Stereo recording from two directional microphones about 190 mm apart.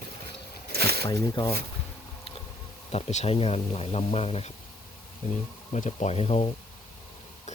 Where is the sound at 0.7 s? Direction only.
55° right (ahead or behind).